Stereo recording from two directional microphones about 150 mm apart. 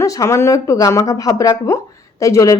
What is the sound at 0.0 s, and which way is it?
A woman's voice, 20° left (ahead or behind).